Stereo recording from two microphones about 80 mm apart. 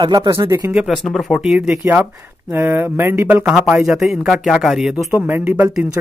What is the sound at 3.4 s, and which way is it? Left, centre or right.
Speech, centre.